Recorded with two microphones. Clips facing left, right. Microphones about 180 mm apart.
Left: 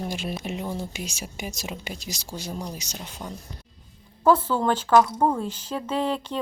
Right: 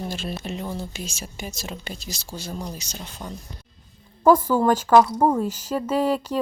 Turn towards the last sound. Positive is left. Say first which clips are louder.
# right 4 dB
turn(degrees=-10)  # may be behind; listen again after turning